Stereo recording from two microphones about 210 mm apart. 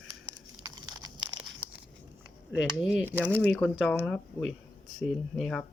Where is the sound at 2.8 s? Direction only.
5° right (ahead or behind).